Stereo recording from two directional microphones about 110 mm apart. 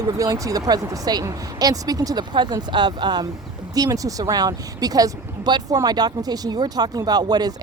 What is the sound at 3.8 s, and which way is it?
Speech, 30° right (ahead or behind).